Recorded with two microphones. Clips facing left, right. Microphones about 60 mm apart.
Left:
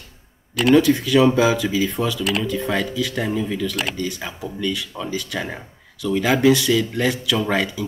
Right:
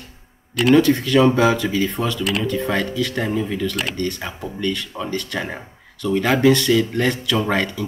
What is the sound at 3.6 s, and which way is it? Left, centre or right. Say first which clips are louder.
Speech: right 1 dB; centre.